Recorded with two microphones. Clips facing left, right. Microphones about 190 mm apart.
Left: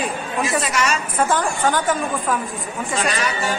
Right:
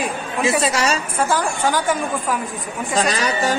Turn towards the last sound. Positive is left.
turn(degrees=-40)  # may be behind; listen again after turning